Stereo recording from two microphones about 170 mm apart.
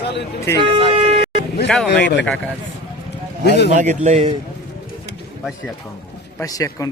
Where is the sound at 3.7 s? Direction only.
45° right (ahead or behind).